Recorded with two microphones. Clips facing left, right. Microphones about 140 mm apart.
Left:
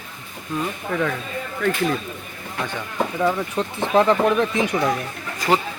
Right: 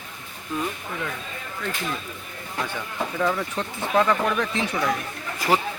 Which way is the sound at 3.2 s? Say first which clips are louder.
Left 3 dB; 15° left (ahead or behind).